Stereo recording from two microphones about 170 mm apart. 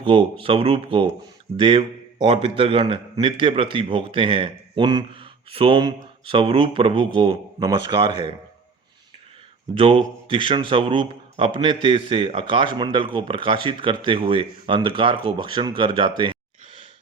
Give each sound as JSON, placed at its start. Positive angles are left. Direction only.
{"t": 0.0, "sound": "a man's voice", "side_deg": -30}
{"t": 9.7, "sound": "a man's voice", "side_deg": -35}